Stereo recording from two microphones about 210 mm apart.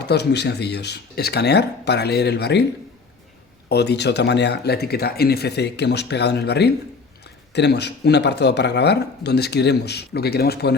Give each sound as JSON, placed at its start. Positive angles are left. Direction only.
{"t": 0.0, "sound": "speech", "side_deg": 50}
{"t": 3.7, "sound": "speech", "side_deg": 50}